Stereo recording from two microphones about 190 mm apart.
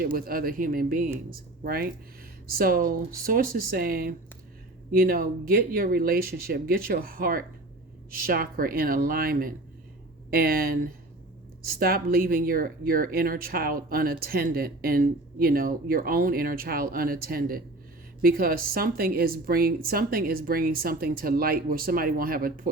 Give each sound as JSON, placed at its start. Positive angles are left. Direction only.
{"t": 0.0, "sound": "speech", "side_deg": -50}